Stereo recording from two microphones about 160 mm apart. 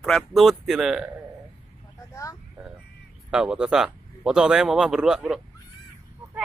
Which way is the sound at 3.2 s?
5° right (ahead or behind).